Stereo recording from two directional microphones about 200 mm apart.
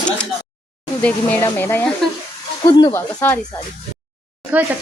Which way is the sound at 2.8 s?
20° left (ahead or behind).